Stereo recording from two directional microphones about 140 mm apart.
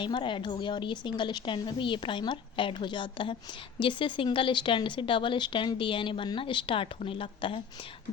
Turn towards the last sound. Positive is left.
turn(degrees=40)  # may be behind; listen again after turning